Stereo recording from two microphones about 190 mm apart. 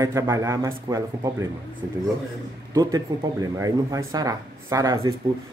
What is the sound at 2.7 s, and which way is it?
A man's voice, 20° right (ahead or behind).